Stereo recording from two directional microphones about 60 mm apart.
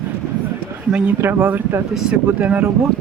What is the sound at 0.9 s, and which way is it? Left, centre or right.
Speech, right.